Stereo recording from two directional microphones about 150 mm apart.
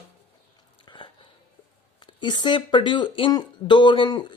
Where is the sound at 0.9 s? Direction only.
30° left (ahead or behind).